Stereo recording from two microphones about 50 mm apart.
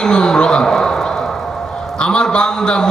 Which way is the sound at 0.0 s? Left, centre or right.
Centre.